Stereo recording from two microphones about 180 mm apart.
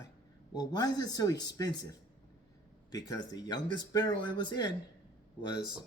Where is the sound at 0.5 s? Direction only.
20° left (ahead or behind).